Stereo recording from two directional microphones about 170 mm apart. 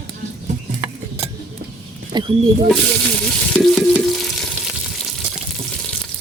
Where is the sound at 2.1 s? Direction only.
25° right (ahead or behind).